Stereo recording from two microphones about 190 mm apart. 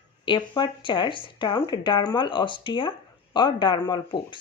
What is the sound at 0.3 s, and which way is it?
Speech, 25° left (ahead or behind).